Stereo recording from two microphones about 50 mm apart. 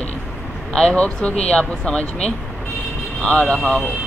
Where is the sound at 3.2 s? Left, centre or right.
Centre.